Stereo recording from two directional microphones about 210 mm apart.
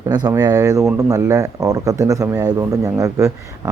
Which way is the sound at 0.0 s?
20° right (ahead or behind).